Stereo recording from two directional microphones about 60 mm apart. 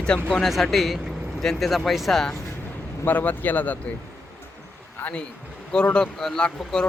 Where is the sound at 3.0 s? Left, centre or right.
Left.